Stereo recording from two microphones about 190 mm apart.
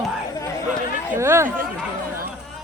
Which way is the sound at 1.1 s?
15° right (ahead or behind).